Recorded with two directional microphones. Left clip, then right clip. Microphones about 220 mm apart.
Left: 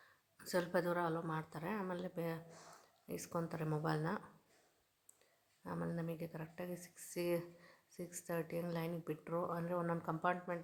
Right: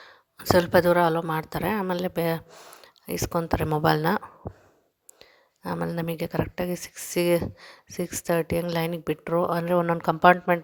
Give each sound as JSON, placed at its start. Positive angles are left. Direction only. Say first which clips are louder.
{"t": 0.0, "sound": "a woman's voice", "louder": "right 18 dB", "side_deg": -40}
{"t": 5.2, "sound": "speech", "louder": "right 17 dB", "side_deg": -40}